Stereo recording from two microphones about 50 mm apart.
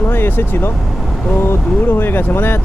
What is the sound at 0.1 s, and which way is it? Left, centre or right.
Speech, left.